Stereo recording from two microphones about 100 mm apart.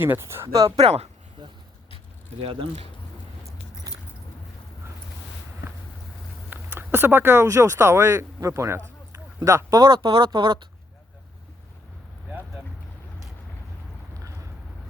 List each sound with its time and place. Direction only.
0.0 s speech: 25° right (ahead or behind)
0.8 s speech: 90° right
2.4 s speech: 70° right (ahead or behind)
3.9 s keys jangling: 40° right (ahead or behind)
6.5 s speech: 20° right (ahead or behind); by 10.7 s 50° right (ahead or behind)